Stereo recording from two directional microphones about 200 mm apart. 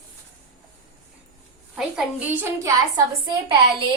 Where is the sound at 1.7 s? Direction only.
Centre (ahead or behind).